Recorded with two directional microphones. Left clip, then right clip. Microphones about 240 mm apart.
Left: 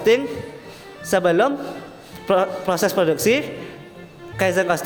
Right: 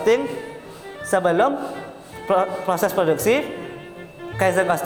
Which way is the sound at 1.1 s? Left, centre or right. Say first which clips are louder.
Left 1 dB; left.